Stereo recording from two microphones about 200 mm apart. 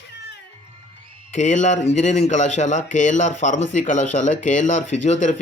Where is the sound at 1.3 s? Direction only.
35° left (ahead or behind).